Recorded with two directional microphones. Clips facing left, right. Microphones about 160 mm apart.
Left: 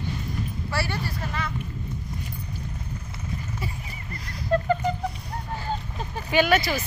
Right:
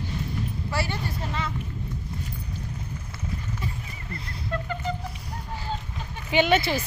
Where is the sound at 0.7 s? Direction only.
20° right (ahead or behind).